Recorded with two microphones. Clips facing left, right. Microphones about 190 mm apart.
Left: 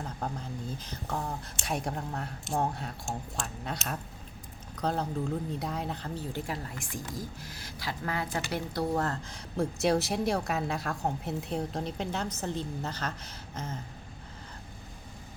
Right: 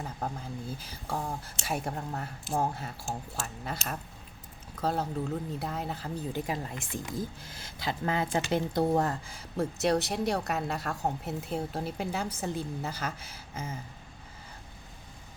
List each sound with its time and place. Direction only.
0.0 s a woman's voice: 5° right (ahead or behind)
6.3 s speech: 20° right (ahead or behind)
9.0 s a woman's voice: 5° right (ahead or behind)